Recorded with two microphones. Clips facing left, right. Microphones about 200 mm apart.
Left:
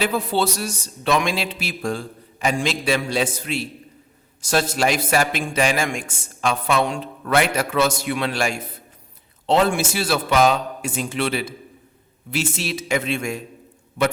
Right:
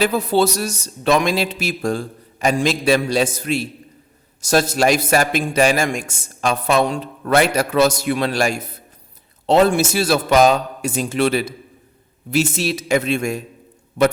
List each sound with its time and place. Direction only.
0.0 s a man's voice: 40° right (ahead or behind)